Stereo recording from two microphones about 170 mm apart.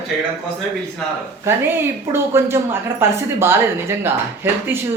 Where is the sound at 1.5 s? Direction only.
15° right (ahead or behind).